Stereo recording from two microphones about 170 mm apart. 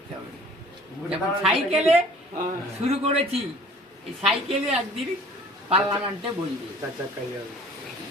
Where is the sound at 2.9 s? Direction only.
35° right (ahead or behind).